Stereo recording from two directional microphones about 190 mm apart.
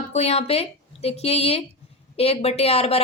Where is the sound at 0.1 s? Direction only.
35° left (ahead or behind).